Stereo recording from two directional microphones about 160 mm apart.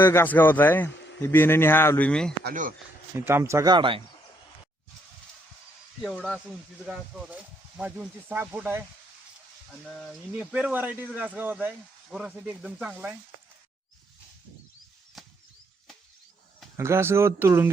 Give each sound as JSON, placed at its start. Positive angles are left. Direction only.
{"t": 0.0, "sound": "speech", "side_deg": 15}
{"t": 3.2, "sound": "speech", "side_deg": -15}
{"t": 6.0, "sound": "speech", "side_deg": 0}
{"t": 9.8, "sound": "speech", "side_deg": 5}
{"t": 16.7, "sound": "speech", "side_deg": -15}